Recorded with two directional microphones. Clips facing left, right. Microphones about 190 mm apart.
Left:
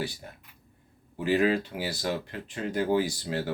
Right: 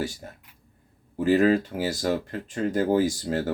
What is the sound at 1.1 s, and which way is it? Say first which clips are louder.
Speech: right 5 dB; 45° right (ahead or behind).